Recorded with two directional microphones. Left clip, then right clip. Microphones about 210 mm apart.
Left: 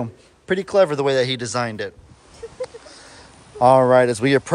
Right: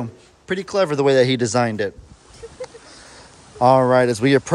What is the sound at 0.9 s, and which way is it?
Speech, 20° right (ahead or behind).